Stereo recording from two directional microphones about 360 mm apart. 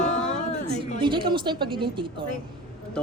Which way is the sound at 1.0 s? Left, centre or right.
Centre.